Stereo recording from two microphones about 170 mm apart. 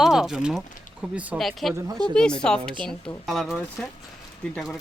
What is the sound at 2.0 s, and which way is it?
Speech, 25° right (ahead or behind).